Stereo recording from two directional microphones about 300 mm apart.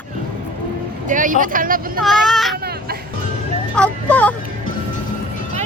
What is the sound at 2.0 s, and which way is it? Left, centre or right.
Speech, centre.